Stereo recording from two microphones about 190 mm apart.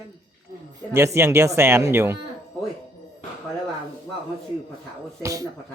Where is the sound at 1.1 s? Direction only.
15° right (ahead or behind).